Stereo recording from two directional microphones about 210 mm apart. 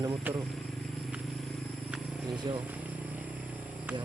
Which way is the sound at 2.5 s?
20° right (ahead or behind).